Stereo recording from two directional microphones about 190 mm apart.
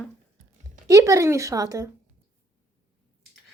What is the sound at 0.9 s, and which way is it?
Speech, 15° right (ahead or behind).